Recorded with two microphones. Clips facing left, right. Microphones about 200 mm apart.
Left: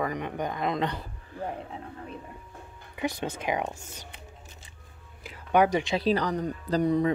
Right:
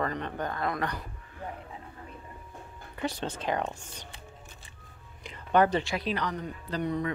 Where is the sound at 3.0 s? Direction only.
10° left (ahead or behind).